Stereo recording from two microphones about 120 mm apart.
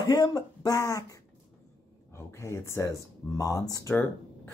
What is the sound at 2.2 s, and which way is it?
Speech, 25° left (ahead or behind).